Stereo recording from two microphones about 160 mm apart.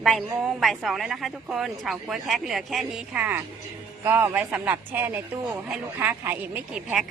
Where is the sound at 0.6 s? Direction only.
Centre (ahead or behind).